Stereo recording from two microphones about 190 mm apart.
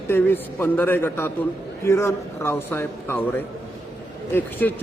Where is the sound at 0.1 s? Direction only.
10° left (ahead or behind).